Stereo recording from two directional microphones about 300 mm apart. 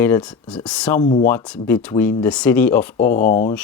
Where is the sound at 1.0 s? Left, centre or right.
Left.